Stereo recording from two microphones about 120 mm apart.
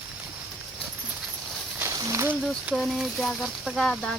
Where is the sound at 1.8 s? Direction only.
25° right (ahead or behind).